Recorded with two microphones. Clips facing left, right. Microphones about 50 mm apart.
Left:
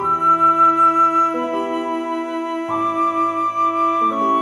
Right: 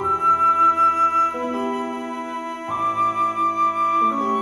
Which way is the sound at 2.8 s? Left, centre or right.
Left.